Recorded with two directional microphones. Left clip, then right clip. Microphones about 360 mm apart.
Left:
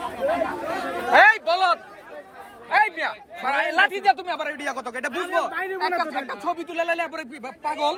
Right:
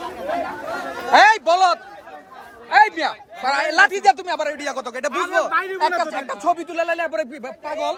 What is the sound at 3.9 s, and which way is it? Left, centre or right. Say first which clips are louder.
Speech: right 4 dB; right.